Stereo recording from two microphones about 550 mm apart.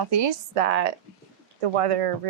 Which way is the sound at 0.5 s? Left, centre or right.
Right.